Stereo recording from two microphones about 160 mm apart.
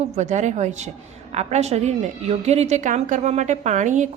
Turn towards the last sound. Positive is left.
turn(degrees=-50)  # may be behind; listen again after turning